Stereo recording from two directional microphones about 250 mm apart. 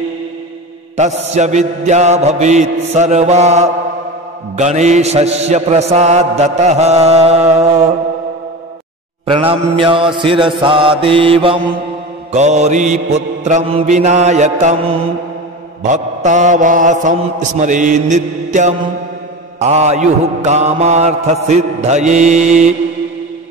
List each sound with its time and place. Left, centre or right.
0.9 s mantra: right
9.2 s mantra: right